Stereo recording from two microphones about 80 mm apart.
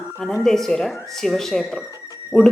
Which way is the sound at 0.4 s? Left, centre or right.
Centre.